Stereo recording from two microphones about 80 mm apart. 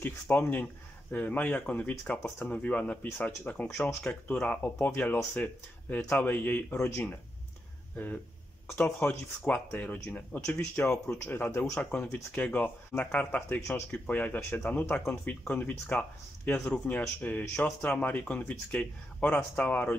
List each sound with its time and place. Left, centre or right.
0.0 s speech: left